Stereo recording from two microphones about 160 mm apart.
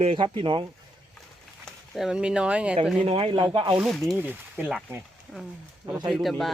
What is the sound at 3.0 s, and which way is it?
Speech, 35° right (ahead or behind).